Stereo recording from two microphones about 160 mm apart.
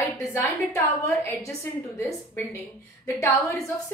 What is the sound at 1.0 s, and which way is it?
A woman's voice, 15° left (ahead or behind).